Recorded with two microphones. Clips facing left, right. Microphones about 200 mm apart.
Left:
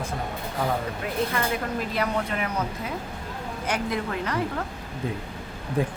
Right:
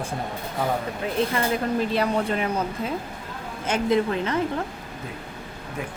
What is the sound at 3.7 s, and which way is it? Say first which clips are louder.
Speech: right 6 dB; 25° right (ahead or behind).